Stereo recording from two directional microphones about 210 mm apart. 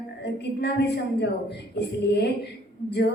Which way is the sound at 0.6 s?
55° left (ahead or behind).